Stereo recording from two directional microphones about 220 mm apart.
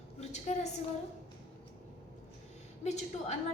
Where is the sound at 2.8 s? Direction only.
30° left (ahead or behind).